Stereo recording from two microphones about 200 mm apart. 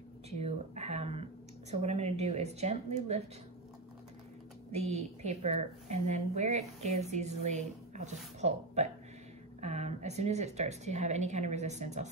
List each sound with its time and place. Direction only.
0.3 s speech: 35° right (ahead or behind)
4.7 s a woman's voice: 35° right (ahead or behind)